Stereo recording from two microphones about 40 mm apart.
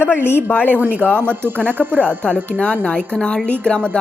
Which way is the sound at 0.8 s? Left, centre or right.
Right.